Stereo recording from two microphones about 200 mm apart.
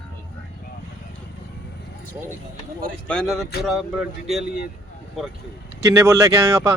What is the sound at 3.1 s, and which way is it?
Speech, 5° left (ahead or behind).